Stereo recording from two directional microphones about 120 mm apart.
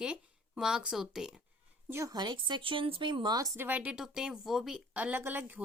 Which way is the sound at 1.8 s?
20° right (ahead or behind).